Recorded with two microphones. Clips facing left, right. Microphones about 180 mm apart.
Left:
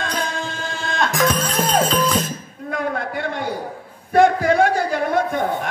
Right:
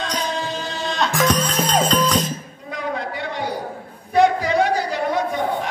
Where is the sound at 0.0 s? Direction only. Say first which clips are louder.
Right 1 dB; 50° left (ahead or behind).